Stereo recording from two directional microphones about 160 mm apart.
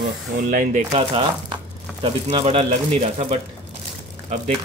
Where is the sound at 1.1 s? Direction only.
30° right (ahead or behind).